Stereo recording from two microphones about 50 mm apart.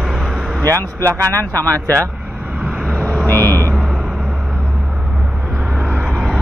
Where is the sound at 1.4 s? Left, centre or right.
Left.